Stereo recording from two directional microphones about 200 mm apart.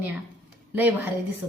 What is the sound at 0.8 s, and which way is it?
Speech, 10° right (ahead or behind).